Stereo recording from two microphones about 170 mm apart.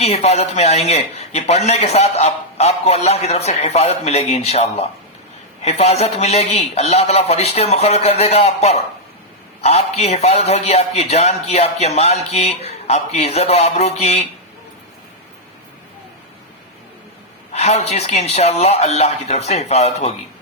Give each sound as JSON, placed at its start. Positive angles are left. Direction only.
{"t": 0.0, "sound": "a man's voice", "side_deg": 40}
{"t": 17.5, "sound": "a man's voice", "side_deg": 40}